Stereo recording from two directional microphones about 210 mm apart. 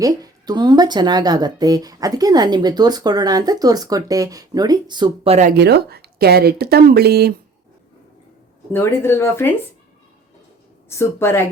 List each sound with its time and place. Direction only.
0.0 s speech: 15° right (ahead or behind); by 5.5 s 30° right (ahead or behind)
5.5 s speech: 50° right (ahead or behind)
8.7 s speech: 10° left (ahead or behind)
10.8 s speech: 10° left (ahead or behind)